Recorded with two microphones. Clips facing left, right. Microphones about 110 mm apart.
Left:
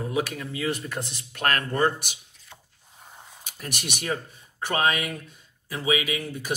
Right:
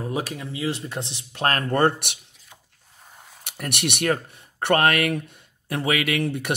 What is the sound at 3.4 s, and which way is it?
Speech, 65° right (ahead or behind).